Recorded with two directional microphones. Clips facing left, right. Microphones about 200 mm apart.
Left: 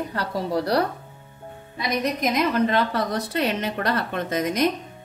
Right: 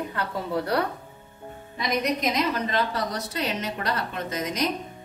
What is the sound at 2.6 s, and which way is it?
Speech, 60° left (ahead or behind).